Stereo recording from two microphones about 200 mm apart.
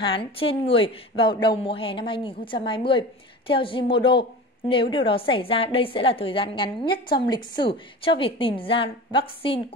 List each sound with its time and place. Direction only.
0.0 s a woman's voice: 25° left (ahead or behind)